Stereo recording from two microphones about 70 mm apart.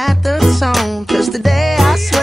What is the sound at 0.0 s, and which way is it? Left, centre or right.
Music, centre.